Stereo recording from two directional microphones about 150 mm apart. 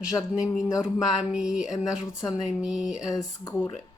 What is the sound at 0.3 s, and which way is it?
Speech, 5° right (ahead or behind).